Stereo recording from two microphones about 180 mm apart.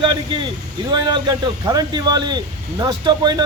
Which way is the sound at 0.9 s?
25° right (ahead or behind).